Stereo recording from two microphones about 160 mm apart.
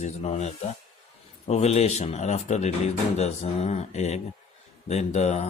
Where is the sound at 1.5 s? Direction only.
45° left (ahead or behind).